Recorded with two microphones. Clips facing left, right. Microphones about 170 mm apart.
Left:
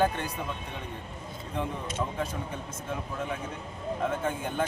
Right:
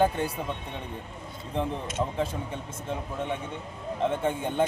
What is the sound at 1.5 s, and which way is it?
Speech, 30° right (ahead or behind).